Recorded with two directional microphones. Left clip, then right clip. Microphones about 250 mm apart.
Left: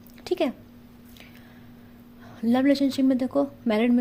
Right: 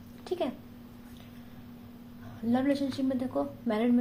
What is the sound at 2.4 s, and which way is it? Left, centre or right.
Speech, left.